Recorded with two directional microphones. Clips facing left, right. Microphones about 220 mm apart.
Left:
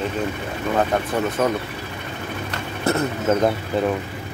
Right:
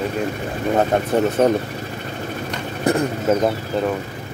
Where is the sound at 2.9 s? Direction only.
15° right (ahead or behind).